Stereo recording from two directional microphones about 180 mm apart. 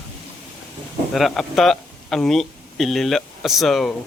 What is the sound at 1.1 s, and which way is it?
Speech, centre (ahead or behind).